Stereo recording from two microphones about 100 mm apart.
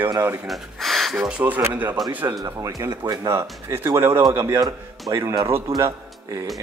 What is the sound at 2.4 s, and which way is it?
Speech, 35° right (ahead or behind).